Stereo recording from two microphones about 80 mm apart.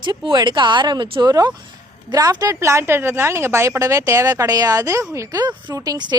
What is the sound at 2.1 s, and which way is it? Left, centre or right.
Speech, right.